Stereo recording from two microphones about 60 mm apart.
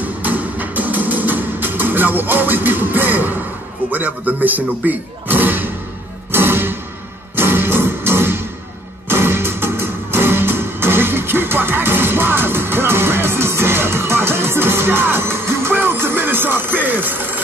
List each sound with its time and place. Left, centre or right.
0.0 s music: right
3.9 s speech: right
6.3 s music: right